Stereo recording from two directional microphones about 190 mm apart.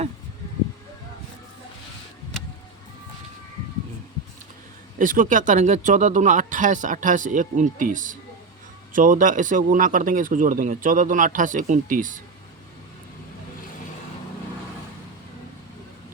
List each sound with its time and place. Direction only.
4.9 s speech: 45° right (ahead or behind)